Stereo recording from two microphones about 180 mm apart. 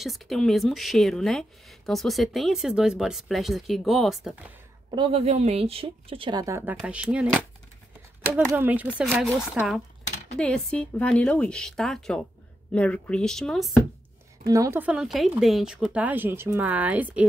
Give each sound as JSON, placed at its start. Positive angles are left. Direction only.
{"t": 0.0, "sound": "speech", "side_deg": 0}
{"t": 4.9, "sound": "a woman's voice", "side_deg": -30}
{"t": 6.4, "sound": "speech", "side_deg": -15}
{"t": 8.3, "sound": "speech", "side_deg": -10}
{"t": 14.5, "sound": "speech", "side_deg": -15}